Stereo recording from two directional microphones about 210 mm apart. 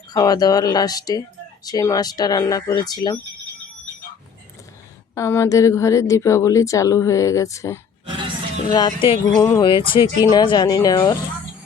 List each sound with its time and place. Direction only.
0.1 s speech: 20° left (ahead or behind)
5.1 s a woman's voice: 15° left (ahead or behind)